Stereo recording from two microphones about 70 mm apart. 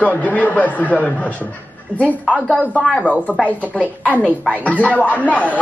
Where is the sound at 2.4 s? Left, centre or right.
Centre.